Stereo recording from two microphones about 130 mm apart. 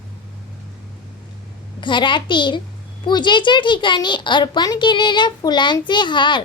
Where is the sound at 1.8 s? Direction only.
40° left (ahead or behind).